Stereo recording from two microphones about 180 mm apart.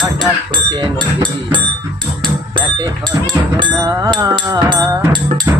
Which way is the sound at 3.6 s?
20° right (ahead or behind).